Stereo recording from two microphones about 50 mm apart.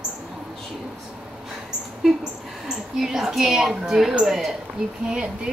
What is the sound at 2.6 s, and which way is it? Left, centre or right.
A woman's voice, centre.